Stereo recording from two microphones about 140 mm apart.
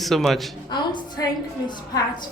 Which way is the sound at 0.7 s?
30° left (ahead or behind).